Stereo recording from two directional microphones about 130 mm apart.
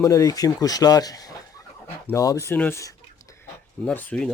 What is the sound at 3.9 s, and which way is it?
Speech, 10° left (ahead or behind).